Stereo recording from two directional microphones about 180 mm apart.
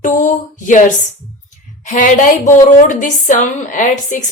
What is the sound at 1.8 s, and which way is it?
A woman's voice, 45° left (ahead or behind).